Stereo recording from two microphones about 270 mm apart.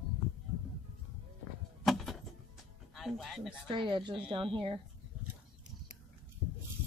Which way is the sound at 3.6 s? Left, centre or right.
Centre.